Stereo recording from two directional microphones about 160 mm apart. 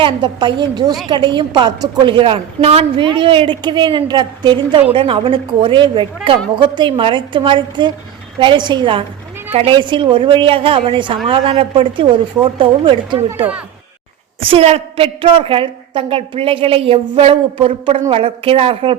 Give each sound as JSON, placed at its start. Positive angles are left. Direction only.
{"t": 0.0, "sound": "a woman's voice", "side_deg": -30}
{"t": 14.4, "sound": "a woman's voice", "side_deg": -40}